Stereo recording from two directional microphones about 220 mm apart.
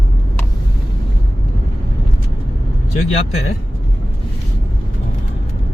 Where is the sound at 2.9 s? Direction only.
30° left (ahead or behind).